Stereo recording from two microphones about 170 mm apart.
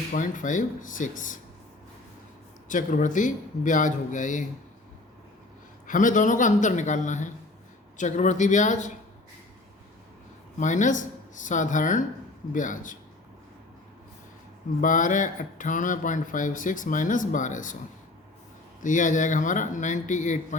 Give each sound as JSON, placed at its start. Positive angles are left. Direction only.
{"t": 0.1, "sound": "a man's voice", "side_deg": 50}
{"t": 2.6, "sound": "a man's voice", "side_deg": 50}
{"t": 5.9, "sound": "a man's voice", "side_deg": 50}
{"t": 10.6, "sound": "a man's voice", "side_deg": 45}
{"t": 14.8, "sound": "a man's voice", "side_deg": 50}
{"t": 18.8, "sound": "a man's voice", "side_deg": 50}